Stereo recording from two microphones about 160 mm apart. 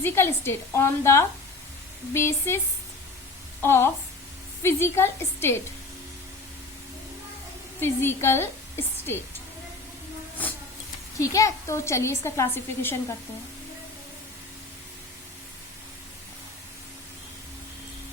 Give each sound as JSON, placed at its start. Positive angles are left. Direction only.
{"t": 0.0, "sound": "a woman's voice", "side_deg": 15}
{"t": 3.6, "sound": "a woman's voice", "side_deg": 15}
{"t": 7.8, "sound": "a woman's voice", "side_deg": 15}
{"t": 11.2, "sound": "a woman's voice", "side_deg": 20}